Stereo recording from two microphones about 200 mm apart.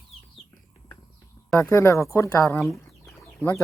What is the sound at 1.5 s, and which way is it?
Speech, 15° left (ahead or behind).